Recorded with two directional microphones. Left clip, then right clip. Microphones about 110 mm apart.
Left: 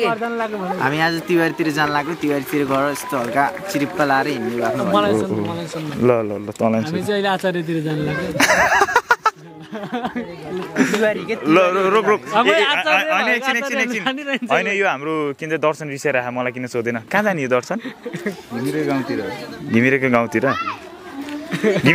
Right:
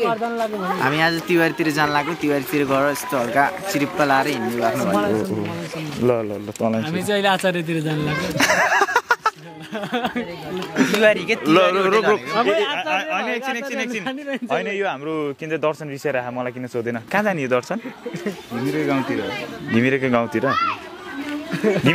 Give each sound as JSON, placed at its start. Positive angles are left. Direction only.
{"t": 0.4, "sound": "speech", "side_deg": 5}
{"t": 6.0, "sound": "speech", "side_deg": 15}
{"t": 7.0, "sound": "speech", "side_deg": 0}
{"t": 8.4, "sound": "a sound", "side_deg": 15}
{"t": 9.9, "sound": "speech", "side_deg": 0}
{"t": 11.0, "sound": "a man's voice", "side_deg": -15}
{"t": 11.5, "sound": "speech", "side_deg": 0}
{"t": 12.4, "sound": "speech", "side_deg": 50}
{"t": 12.7, "sound": "speech", "side_deg": 10}
{"t": 19.7, "sound": "speech", "side_deg": 10}
{"t": 21.5, "sound": "a sound", "side_deg": 45}